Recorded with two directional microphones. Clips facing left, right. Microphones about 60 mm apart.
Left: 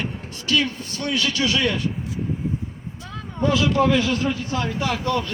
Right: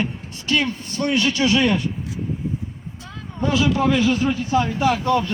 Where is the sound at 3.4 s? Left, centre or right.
Centre.